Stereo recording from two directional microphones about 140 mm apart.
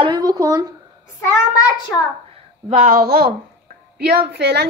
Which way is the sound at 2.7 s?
80° right.